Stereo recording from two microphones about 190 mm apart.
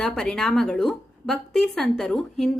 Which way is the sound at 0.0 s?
5° left (ahead or behind).